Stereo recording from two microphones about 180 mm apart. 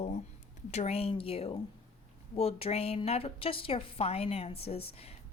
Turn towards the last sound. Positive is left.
turn(degrees=35)  # may be behind; listen again after turning